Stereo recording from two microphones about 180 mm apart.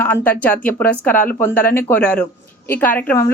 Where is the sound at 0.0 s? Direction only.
10° left (ahead or behind).